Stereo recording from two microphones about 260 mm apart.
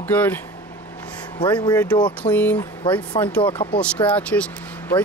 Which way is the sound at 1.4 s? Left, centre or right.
Centre.